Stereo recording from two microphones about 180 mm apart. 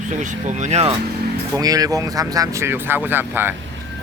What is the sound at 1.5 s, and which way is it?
Speech, 20° right (ahead or behind).